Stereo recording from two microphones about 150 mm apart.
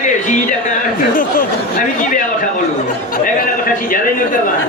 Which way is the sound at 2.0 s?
65° left (ahead or behind).